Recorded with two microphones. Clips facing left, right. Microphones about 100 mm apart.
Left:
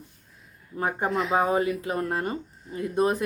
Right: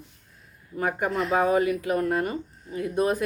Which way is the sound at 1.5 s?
25° left (ahead or behind).